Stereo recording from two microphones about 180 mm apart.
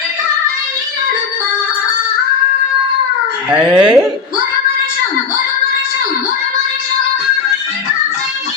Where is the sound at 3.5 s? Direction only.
5° right (ahead or behind).